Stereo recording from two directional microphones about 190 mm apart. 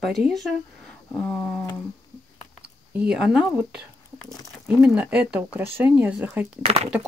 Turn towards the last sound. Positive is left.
turn(degrees=-30)  # may be behind; listen again after turning